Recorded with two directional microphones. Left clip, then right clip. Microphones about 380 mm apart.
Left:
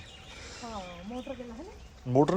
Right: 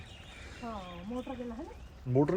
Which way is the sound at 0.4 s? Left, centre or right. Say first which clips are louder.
Left 1 dB; centre.